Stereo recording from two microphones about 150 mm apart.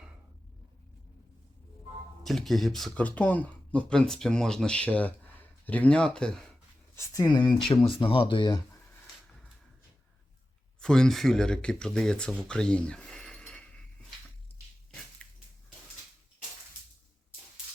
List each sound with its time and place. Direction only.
2.2 s speech: centre (ahead or behind)
6.9 s speech: 20° left (ahead or behind)
10.8 s speech: 5° left (ahead or behind)
15.2 s a sound: 5° left (ahead or behind)